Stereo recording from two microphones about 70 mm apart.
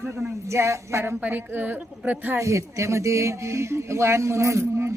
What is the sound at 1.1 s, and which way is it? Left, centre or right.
A woman's voice, right.